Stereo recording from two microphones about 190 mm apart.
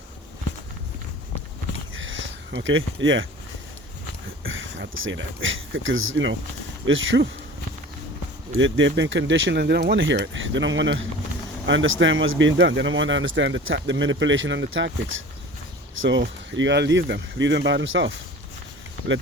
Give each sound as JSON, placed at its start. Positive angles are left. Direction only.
{"t": 2.0, "sound": "a sound", "side_deg": -80}
{"t": 4.4, "sound": "speech", "side_deg": -85}
{"t": 8.5, "sound": "speech", "side_deg": -90}